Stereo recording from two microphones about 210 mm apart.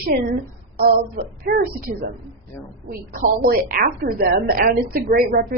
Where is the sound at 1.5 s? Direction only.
45° right (ahead or behind).